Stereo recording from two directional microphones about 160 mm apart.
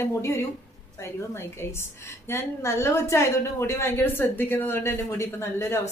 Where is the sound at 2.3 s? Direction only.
15° left (ahead or behind).